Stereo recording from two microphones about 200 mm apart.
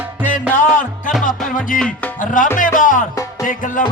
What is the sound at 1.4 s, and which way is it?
Music, 40° left (ahead or behind).